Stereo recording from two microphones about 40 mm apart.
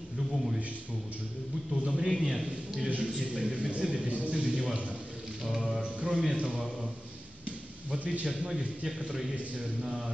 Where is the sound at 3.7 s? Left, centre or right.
Right.